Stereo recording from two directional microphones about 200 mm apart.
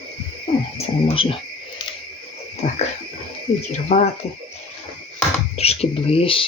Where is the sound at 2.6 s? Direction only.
30° left (ahead or behind).